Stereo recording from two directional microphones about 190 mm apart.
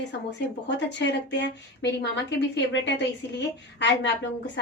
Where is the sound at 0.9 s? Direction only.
65° left (ahead or behind).